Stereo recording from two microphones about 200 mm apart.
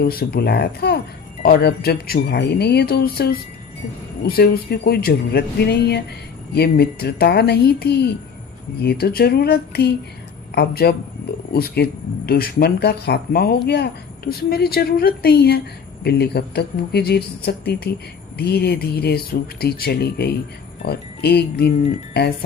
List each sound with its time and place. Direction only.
0.0 s speech: 50° left (ahead or behind)